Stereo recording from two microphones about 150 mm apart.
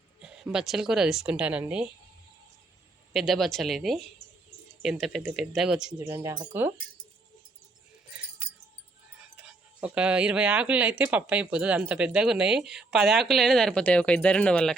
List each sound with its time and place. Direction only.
0.2 s speech: 5° right (ahead or behind)
3.1 s speech: centre (ahead or behind)
6.1 s speech: 20° right (ahead or behind)
9.4 s speech: 5° right (ahead or behind)